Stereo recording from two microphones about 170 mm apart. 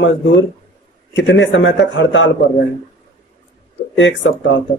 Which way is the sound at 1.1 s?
90° left.